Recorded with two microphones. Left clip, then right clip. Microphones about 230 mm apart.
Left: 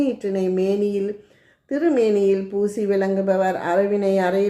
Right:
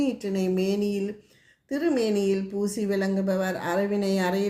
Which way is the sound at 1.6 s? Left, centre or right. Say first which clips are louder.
Left 6 dB; right.